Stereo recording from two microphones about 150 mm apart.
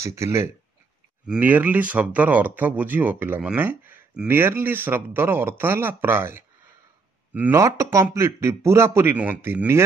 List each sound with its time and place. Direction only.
0.0 s speech: 20° right (ahead or behind)
1.2 s speech: 10° right (ahead or behind)